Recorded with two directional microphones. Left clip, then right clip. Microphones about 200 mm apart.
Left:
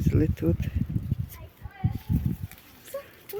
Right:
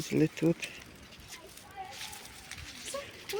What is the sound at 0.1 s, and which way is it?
Speech, 10° left (ahead or behind).